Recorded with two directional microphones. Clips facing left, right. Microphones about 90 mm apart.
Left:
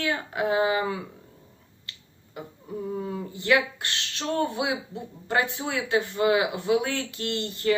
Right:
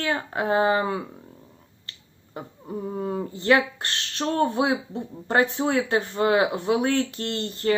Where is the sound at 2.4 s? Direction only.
35° right (ahead or behind).